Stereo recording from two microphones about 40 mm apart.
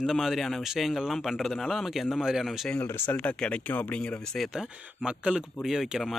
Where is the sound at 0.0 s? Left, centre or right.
Centre.